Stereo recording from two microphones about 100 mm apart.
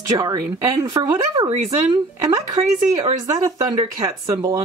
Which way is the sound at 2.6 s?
75° right (ahead or behind).